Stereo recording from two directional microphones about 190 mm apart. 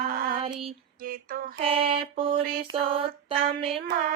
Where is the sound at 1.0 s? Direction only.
50° right (ahead or behind).